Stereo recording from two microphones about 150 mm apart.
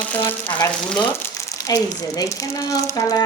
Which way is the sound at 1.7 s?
25° left (ahead or behind).